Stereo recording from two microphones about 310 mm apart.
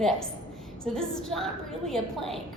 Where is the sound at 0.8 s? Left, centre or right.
Centre.